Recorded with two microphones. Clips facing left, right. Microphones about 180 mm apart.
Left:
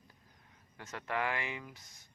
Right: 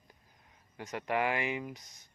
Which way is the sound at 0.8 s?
15° right (ahead or behind).